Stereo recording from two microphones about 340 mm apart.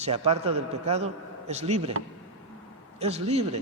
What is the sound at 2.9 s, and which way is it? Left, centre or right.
Speech, centre.